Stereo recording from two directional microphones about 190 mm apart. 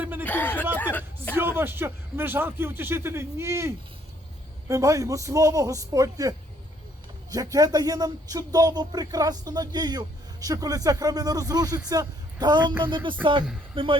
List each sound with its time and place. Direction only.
0.0 s a sound: 10° right (ahead or behind)
0.3 s speech: 10° left (ahead or behind)
0.8 s chatter: 10° left (ahead or behind)
1.4 s a man's voice: 10° right (ahead or behind); by 14.0 s 30° right (ahead or behind)